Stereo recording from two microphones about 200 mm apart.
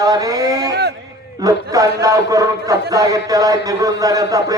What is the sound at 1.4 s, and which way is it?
A man's voice, 15° right (ahead or behind).